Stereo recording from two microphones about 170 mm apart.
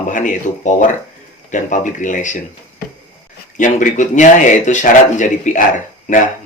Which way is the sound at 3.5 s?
50° left (ahead or behind).